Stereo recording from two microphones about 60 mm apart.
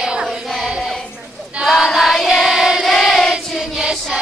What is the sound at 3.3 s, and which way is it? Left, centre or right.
Choir, centre.